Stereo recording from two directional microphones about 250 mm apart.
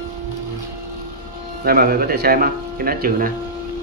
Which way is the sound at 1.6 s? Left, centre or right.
Right.